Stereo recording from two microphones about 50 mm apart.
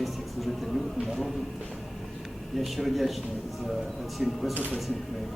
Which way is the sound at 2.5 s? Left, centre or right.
Centre.